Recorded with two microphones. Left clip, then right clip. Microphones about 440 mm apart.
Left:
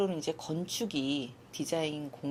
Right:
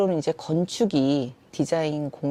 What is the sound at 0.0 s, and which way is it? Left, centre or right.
Speech, right.